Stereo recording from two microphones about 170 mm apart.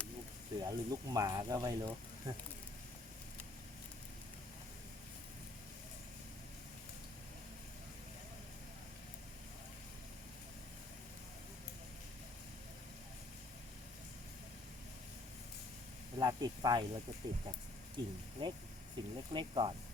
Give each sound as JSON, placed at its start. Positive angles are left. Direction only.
{"t": 0.6, "sound": "speech", "side_deg": -20}
{"t": 16.1, "sound": "snake", "side_deg": -25}
{"t": 17.9, "sound": "speech", "side_deg": -25}